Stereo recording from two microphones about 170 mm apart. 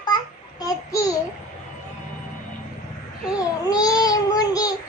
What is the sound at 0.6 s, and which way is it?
Child singing, 20° left (ahead or behind).